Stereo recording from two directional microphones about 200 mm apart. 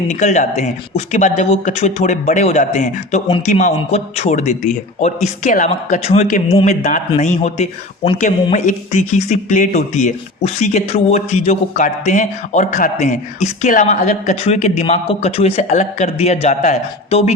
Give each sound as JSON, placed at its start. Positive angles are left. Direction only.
{"t": 0.1, "sound": "speech", "side_deg": 35}